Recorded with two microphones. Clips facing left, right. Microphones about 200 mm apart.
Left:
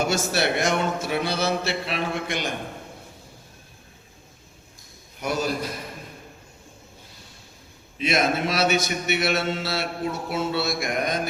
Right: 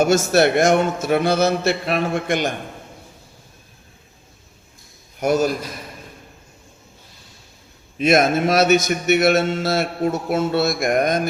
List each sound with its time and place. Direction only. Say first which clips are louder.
0.0 s a man's voice: right 8 dB; 45° right (ahead or behind)
5.2 s a man's voice: right 9 dB; 45° right (ahead or behind)
7.9 s a man's voice: right 7 dB; 45° right (ahead or behind)